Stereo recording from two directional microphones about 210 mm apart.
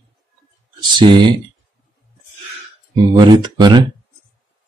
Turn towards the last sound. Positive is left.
turn(degrees=-20)  # may be behind; listen again after turning